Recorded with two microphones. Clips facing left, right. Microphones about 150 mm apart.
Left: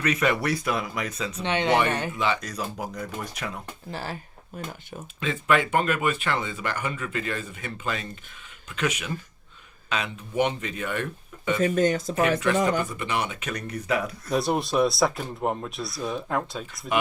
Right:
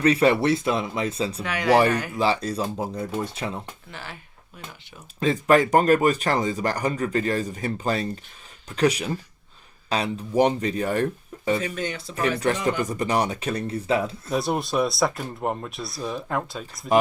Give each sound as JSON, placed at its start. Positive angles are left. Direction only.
{"t": 0.0, "sound": "speech", "side_deg": -30}
{"t": 1.4, "sound": "speech", "side_deg": 25}
{"t": 2.1, "sound": "speech", "side_deg": -35}
{"t": 3.9, "sound": "speech", "side_deg": 40}
{"t": 5.2, "sound": "speech", "side_deg": -40}
{"t": 11.6, "sound": "speech", "side_deg": 45}
{"t": 12.8, "sound": "speech", "side_deg": -40}
{"t": 14.3, "sound": "speech", "side_deg": 0}